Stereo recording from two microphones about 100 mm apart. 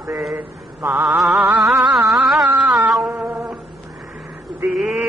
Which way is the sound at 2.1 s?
5° right (ahead or behind).